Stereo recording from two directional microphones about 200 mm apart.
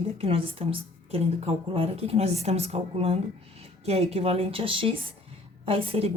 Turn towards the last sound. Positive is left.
turn(degrees=-25)  # may be behind; listen again after turning